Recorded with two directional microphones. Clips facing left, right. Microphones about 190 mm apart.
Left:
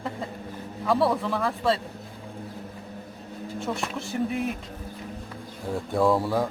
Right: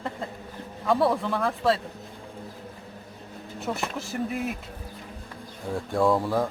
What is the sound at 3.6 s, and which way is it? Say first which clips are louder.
Speech: right 1 dB; centre (ahead or behind).